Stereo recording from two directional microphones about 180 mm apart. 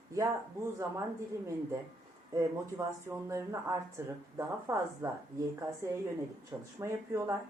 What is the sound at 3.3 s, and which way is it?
A woman's voice, 15° right (ahead or behind).